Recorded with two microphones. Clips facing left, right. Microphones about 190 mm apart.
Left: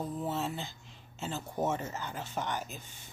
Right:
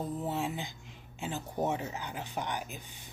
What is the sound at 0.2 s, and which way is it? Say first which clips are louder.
Speech: even; 15° right (ahead or behind).